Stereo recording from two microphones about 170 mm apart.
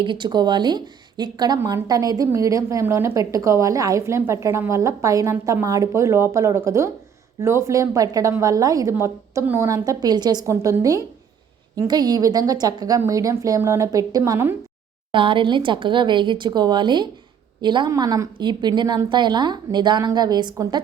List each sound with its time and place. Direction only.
0.0 s speech: 30° right (ahead or behind)
15.1 s speech: 30° right (ahead or behind)